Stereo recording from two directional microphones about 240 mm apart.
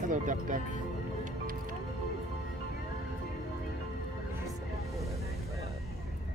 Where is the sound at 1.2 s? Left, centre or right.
Right.